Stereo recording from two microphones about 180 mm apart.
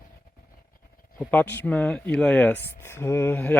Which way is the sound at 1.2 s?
10° left (ahead or behind).